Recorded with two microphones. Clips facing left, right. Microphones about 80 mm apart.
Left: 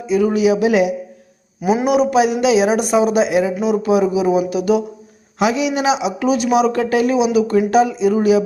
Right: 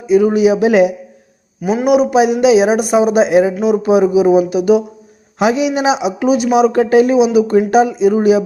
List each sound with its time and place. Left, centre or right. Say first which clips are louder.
0.1 s speech: right 4 dB; right
1.6 s a man's voice: right 1 dB; centre
1.9 s speech: right 5 dB; centre